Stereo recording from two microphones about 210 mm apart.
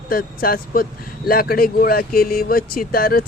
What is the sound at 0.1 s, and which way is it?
Speech, 45° left (ahead or behind).